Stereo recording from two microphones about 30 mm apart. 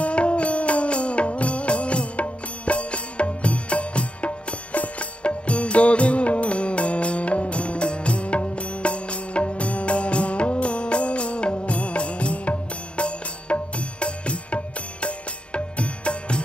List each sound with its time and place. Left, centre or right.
0.0 s music: left
4.7 s music: left
5.2 s music: left